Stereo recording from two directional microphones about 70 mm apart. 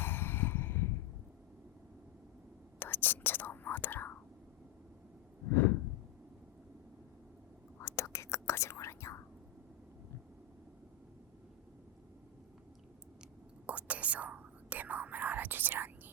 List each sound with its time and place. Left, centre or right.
0.0 s a sound: left
2.7 s whispering: left
7.8 s whispering: left
13.7 s whispering: right